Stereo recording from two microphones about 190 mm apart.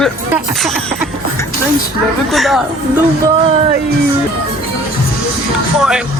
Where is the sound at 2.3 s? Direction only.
Centre (ahead or behind).